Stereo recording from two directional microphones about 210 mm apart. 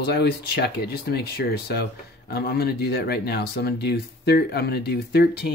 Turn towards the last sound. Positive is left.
turn(degrees=50)  # may be behind; listen again after turning